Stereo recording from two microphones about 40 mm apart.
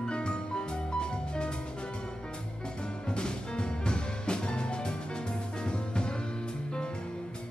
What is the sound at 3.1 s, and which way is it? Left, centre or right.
Music, left.